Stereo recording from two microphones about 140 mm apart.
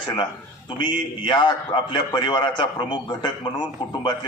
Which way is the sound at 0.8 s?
35° left (ahead or behind).